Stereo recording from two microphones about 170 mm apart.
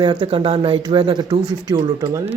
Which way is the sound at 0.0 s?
30° right (ahead or behind).